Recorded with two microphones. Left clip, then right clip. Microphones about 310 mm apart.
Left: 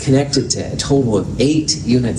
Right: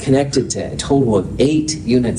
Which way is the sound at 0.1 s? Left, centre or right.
Right.